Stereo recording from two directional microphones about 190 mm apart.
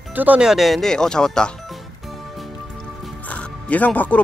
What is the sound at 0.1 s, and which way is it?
Speech, 10° right (ahead or behind).